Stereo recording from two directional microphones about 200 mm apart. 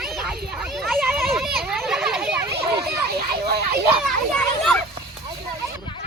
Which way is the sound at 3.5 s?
50° right (ahead or behind).